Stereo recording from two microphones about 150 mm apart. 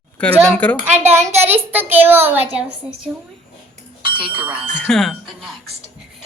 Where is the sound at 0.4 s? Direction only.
10° left (ahead or behind).